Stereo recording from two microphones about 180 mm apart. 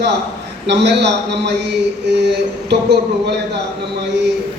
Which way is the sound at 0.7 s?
70° right (ahead or behind).